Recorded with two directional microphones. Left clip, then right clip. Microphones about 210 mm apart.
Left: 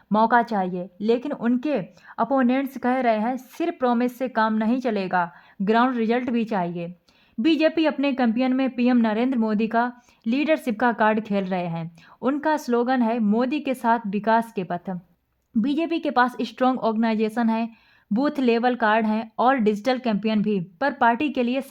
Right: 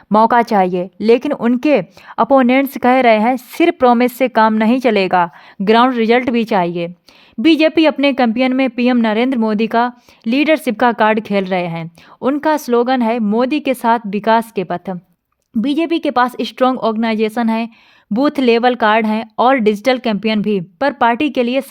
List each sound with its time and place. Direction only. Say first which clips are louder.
0.1 s speech: right 8 dB; 45° right (ahead or behind)